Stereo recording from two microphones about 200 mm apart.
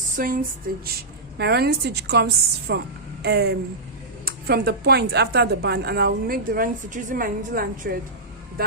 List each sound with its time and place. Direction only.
0.2 s a woman's voice: 45° right (ahead or behind)
1.4 s a woman's voice: 55° right (ahead or behind)